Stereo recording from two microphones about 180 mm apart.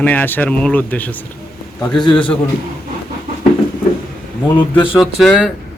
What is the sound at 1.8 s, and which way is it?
Speech, 25° left (ahead or behind).